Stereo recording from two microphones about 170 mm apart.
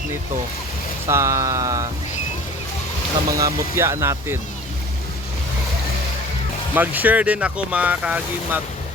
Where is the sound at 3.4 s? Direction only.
15° right (ahead or behind).